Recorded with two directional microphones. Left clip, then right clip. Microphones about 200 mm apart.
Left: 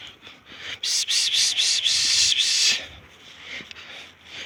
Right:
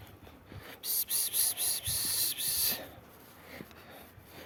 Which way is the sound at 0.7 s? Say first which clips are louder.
Left 16 dB; 20° right (ahead or behind).